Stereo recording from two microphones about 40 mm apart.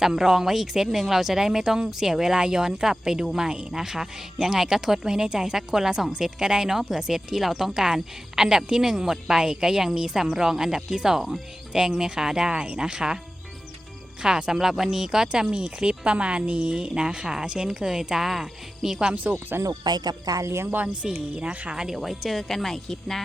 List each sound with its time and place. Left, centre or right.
0.0 s speech: centre
14.2 s speech: centre
19.1 s speech: right
21.2 s speech: right
21.7 s speech: centre
21.9 s speech: centre